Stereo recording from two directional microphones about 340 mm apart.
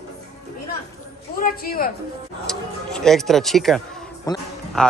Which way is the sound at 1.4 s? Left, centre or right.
Left.